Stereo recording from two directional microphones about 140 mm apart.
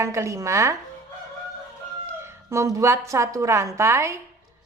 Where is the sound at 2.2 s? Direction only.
20° right (ahead or behind).